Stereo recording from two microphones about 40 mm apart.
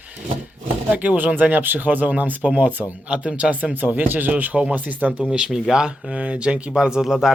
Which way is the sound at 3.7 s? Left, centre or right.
Right.